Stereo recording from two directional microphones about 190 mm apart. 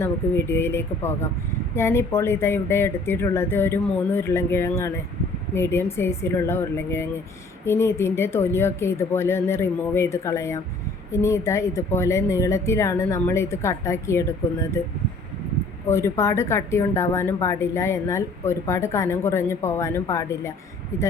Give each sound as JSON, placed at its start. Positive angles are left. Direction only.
{"t": 0.0, "sound": "a woman's voice", "side_deg": 10}
{"t": 15.9, "sound": "a woman's voice", "side_deg": 15}